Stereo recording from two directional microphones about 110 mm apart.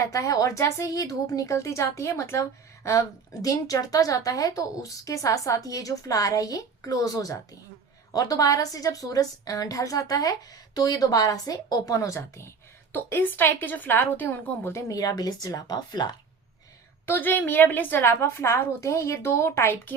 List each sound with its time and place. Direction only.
0.0 s a woman's voice: 30° left (ahead or behind)
17.1 s a woman's voice: 15° left (ahead or behind)